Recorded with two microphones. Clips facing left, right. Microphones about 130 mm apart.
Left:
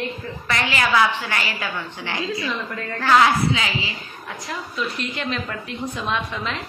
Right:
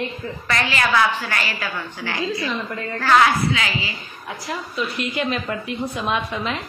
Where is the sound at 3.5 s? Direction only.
25° left (ahead or behind).